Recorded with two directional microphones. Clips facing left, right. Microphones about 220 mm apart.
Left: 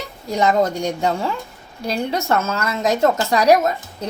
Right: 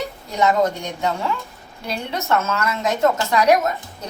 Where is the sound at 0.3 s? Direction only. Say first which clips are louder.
Left 1 dB; 35° left (ahead or behind).